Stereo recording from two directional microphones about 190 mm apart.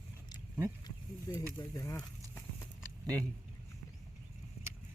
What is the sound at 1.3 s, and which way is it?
Speech, 20° left (ahead or behind).